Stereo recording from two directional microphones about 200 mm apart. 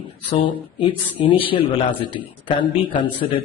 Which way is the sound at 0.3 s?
25° left (ahead or behind).